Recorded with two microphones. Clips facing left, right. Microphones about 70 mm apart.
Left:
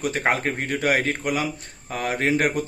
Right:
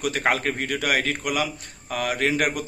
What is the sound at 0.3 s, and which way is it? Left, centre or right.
Speech, left.